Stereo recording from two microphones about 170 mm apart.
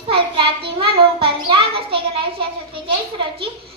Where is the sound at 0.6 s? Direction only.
30° right (ahead or behind).